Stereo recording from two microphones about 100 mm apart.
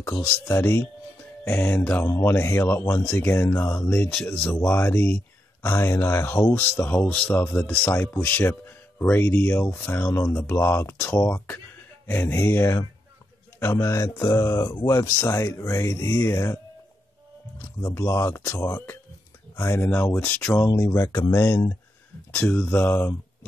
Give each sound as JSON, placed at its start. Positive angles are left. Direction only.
{"t": 0.0, "sound": "speech", "side_deg": 30}
{"t": 10.1, "sound": "speech", "side_deg": 30}
{"t": 17.7, "sound": "speech", "side_deg": 30}
{"t": 20.6, "sound": "speech", "side_deg": 35}